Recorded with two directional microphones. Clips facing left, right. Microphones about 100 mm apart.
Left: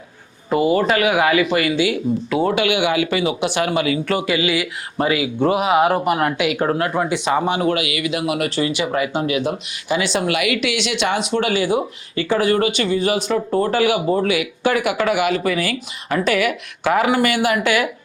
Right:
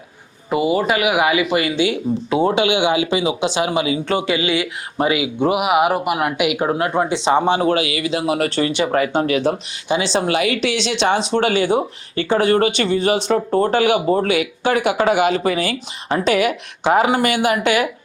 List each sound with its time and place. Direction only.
0.5 s speech: 15° right (ahead or behind)
12.5 s speech: 50° right (ahead or behind)
12.9 s speech: 25° right (ahead or behind)